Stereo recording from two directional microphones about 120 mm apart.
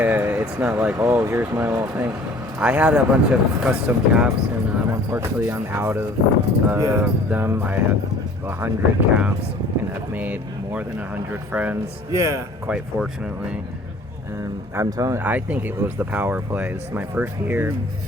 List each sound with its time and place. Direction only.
0.0 s speech: 15° right (ahead or behind)
4.8 s speech: 20° right (ahead or behind)
12.1 s speech: 25° right (ahead or behind)
12.6 s speech: 5° right (ahead or behind)
14.8 s speech: 30° right (ahead or behind)
15.2 s speech: 15° right (ahead or behind)